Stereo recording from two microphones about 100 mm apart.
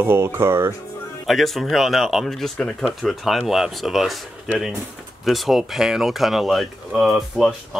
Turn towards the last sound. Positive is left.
turn(degrees=0)  # may be behind; listen again after turning